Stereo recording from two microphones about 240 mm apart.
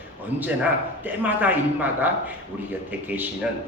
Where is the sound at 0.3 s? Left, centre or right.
Centre.